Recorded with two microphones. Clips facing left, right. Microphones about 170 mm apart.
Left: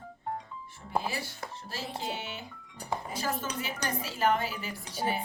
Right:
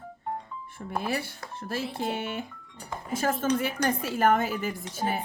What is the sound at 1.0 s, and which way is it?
Speech, 60° right (ahead or behind).